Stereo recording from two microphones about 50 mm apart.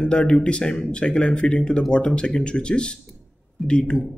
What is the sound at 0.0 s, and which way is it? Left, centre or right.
Speech, left.